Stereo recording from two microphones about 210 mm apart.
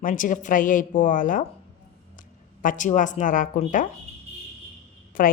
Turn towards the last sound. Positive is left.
turn(degrees=40)  # may be behind; listen again after turning